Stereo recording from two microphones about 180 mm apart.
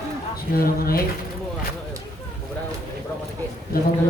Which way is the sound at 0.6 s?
55° left (ahead or behind).